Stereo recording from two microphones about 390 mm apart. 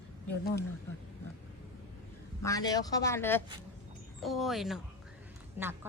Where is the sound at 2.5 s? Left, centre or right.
Centre.